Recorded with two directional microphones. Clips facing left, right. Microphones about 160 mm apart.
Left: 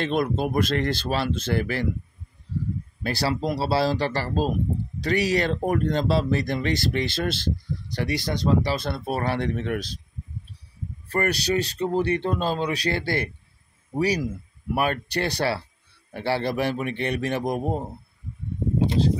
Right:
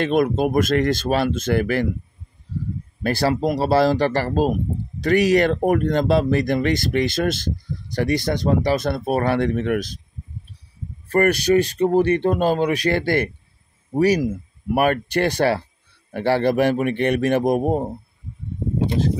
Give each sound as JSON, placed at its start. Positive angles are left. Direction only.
{"t": 0.0, "sound": "speech", "side_deg": -50}
{"t": 3.0, "sound": "speech", "side_deg": -50}
{"t": 11.1, "sound": "speech", "side_deg": -50}